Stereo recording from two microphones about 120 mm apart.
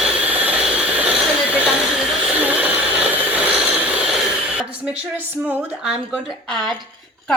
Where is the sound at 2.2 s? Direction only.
10° right (ahead or behind).